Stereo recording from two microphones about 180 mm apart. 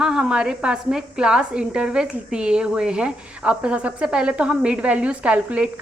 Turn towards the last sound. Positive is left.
turn(degrees=-5)  # may be behind; listen again after turning